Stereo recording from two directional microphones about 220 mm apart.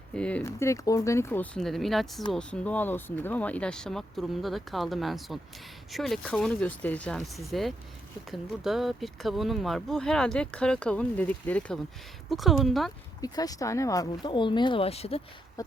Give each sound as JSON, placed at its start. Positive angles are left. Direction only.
{"t": 0.1, "sound": "speech", "side_deg": 5}
{"t": 13.2, "sound": "speech", "side_deg": 15}
{"t": 15.6, "sound": "a sound", "side_deg": 15}